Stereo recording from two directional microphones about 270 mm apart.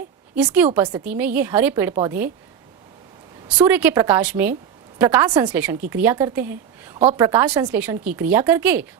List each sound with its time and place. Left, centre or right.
0.3 s a woman's voice: centre
3.5 s a woman's voice: centre
7.0 s a woman's voice: right
7.3 s a woman's voice: centre